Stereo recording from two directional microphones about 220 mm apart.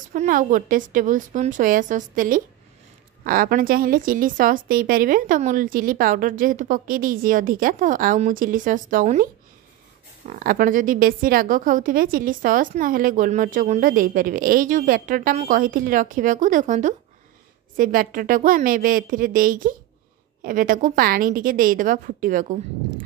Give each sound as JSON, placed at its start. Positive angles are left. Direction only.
{"t": 0.1, "sound": "a woman's voice", "side_deg": -35}